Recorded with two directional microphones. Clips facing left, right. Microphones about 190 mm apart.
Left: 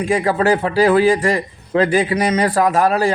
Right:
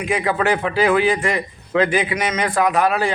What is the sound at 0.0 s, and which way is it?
A man's voice, 35° left (ahead or behind).